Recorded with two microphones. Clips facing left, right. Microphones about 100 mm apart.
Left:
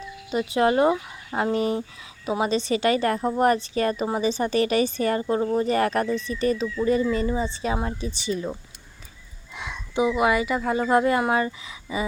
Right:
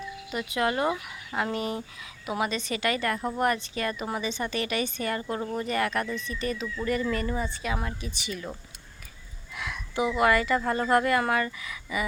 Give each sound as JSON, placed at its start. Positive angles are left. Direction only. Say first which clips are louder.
{"t": 0.3, "sound": "a woman's voice", "louder": "left 7 dB", "side_deg": 30}
{"t": 5.6, "sound": "a woman's voice", "louder": "left 6 dB", "side_deg": 35}
{"t": 6.8, "sound": "speech", "louder": "left 6 dB", "side_deg": 20}
{"t": 9.6, "sound": "speech", "louder": "left 4 dB", "side_deg": 25}